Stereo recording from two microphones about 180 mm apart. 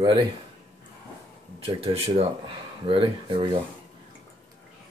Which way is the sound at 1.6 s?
30° right (ahead or behind).